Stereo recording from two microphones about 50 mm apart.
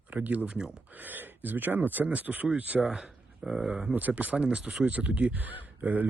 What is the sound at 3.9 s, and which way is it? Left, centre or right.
Speech, right.